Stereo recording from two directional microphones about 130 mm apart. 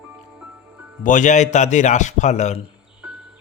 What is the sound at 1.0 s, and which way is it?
A man's voice, 80° left.